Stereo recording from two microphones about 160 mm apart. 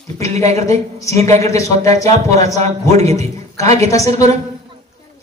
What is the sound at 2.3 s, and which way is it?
A man's voice, 45° right (ahead or behind).